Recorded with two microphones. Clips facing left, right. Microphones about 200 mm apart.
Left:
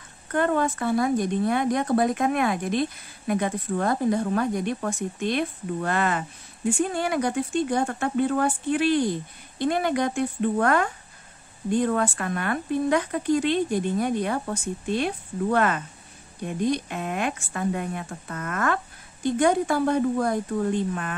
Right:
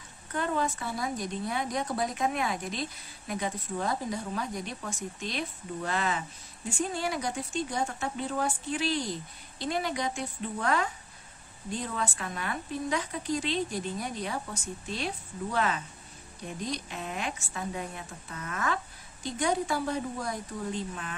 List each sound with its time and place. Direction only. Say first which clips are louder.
0.3 s a woman's voice: left 7 dB; 60° left (ahead or behind)